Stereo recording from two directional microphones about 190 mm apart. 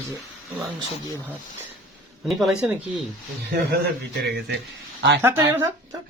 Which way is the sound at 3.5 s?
60° right (ahead or behind).